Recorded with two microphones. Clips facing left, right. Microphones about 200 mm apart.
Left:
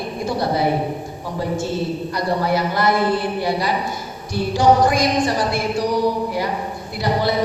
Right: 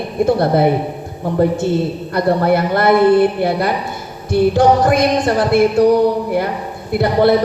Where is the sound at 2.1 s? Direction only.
55° right (ahead or behind).